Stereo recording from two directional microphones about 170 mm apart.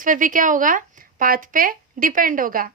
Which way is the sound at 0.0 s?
50° right (ahead or behind).